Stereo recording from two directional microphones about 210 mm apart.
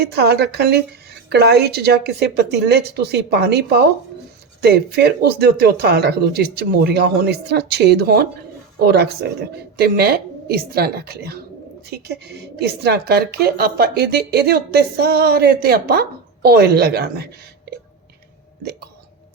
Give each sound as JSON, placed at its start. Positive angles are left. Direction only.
{"t": 0.0, "sound": "a woman's voice", "side_deg": -50}